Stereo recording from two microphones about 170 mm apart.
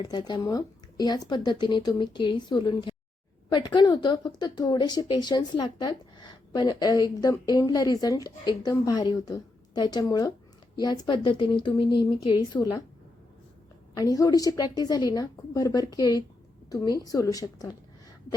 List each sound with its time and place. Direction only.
0.0 s speech: 25° left (ahead or behind)
13.9 s speech: 20° left (ahead or behind)